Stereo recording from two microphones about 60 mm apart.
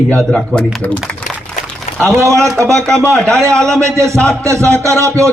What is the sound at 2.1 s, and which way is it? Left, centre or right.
Speech, right.